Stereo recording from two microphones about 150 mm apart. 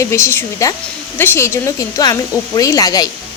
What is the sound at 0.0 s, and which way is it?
Speech, 20° left (ahead or behind).